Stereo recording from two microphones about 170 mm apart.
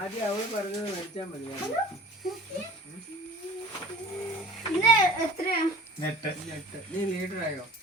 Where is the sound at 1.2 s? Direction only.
35° left (ahead or behind).